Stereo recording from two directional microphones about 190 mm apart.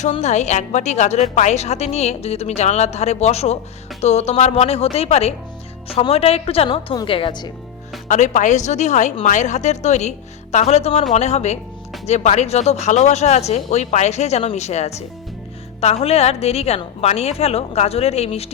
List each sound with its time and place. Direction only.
0.0 s a woman's voice: 35° left (ahead or behind)
8.0 s a woman's voice: 40° left (ahead or behind)